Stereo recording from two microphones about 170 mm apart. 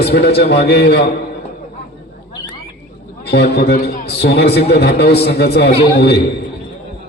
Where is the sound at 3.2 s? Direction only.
75° left (ahead or behind).